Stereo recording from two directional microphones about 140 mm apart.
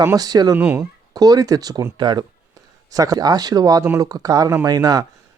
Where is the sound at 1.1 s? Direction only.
25° right (ahead or behind).